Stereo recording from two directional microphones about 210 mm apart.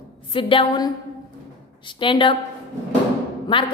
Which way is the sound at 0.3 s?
25° left (ahead or behind).